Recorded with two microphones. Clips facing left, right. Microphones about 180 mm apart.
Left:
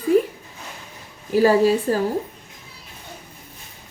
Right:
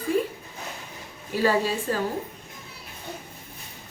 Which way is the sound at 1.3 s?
40° left (ahead or behind).